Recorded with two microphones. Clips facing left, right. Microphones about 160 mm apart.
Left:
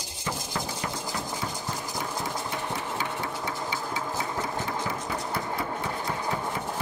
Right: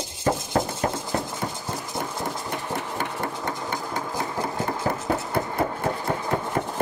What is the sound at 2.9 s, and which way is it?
Engine, 55° right (ahead or behind).